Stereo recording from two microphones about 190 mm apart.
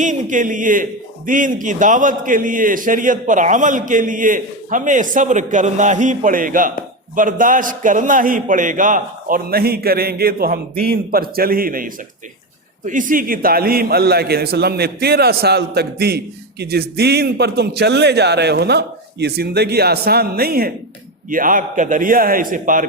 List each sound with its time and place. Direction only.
0.0 s a man's voice: 40° right (ahead or behind)